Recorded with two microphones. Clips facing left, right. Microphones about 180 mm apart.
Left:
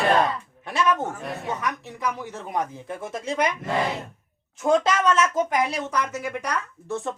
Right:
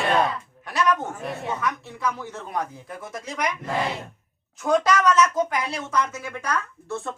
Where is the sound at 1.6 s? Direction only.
15° left (ahead or behind).